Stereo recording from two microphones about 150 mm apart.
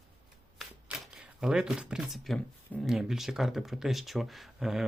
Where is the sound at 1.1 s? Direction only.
5° right (ahead or behind).